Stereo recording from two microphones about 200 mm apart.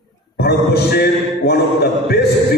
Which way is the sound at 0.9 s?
50° left (ahead or behind).